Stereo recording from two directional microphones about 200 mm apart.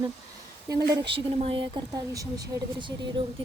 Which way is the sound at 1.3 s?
30° right (ahead or behind).